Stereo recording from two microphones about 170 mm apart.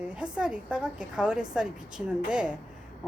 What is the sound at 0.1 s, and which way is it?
Speech, 5° right (ahead or behind).